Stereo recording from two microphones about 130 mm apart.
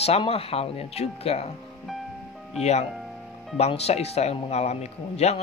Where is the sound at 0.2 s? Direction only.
50° left (ahead or behind).